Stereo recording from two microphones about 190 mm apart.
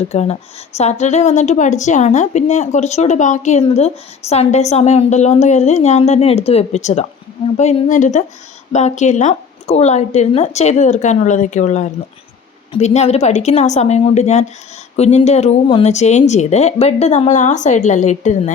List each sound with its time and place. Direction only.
0.1 s a woman's voice: 35° left (ahead or behind)